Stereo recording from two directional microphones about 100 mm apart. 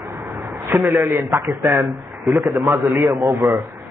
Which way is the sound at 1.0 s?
25° right (ahead or behind).